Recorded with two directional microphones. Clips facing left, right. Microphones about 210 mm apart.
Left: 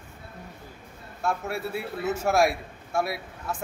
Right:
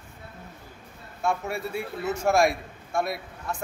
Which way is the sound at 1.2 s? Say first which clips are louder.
Right 1 dB; 5° left (ahead or behind).